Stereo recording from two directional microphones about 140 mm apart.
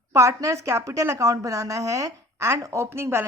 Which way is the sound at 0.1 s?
20° right (ahead or behind).